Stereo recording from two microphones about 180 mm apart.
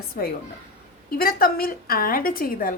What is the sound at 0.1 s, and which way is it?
A woman's voice, 55° left (ahead or behind).